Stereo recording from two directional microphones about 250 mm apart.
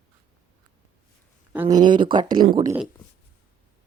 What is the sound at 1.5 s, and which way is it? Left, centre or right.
Speech, centre.